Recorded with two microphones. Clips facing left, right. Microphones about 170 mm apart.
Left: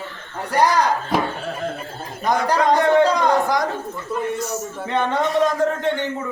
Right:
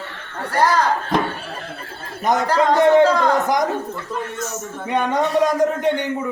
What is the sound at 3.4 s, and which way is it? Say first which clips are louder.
Speech: right 2 dB; 20° right (ahead or behind).